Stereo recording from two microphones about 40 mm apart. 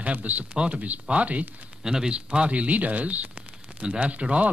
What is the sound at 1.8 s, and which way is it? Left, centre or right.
Speech, centre.